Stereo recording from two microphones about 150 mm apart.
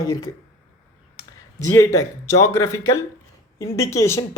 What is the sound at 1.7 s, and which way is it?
Speech, 20° left (ahead or behind).